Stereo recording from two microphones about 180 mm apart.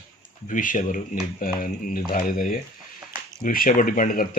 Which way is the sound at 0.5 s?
45° left (ahead or behind).